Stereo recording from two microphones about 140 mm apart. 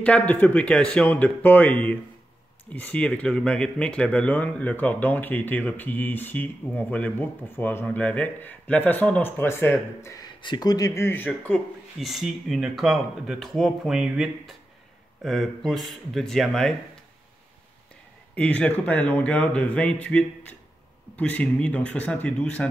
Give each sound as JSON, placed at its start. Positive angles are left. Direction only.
{"t": 0.0, "sound": "speech", "side_deg": 10}
{"t": 10.4, "sound": "speech", "side_deg": 30}
{"t": 12.0, "sound": "speech", "side_deg": 0}
{"t": 18.3, "sound": "speech", "side_deg": 10}